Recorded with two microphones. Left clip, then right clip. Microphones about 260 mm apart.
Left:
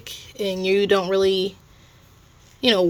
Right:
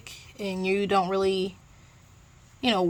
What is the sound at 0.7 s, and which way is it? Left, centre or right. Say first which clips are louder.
Speech: left 5 dB; centre.